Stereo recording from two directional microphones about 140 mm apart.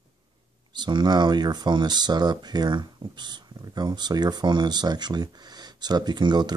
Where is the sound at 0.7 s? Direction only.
30° right (ahead or behind).